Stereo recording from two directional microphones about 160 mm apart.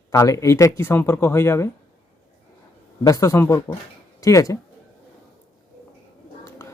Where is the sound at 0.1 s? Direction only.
20° left (ahead or behind).